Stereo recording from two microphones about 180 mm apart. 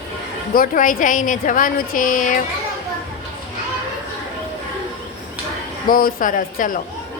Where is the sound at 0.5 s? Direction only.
50° left (ahead or behind).